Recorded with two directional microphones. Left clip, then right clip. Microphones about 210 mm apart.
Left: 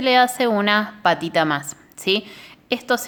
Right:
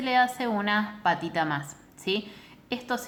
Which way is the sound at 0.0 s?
55° left (ahead or behind).